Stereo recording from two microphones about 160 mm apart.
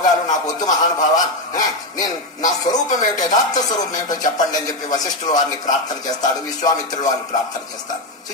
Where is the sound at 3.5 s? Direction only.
25° left (ahead or behind).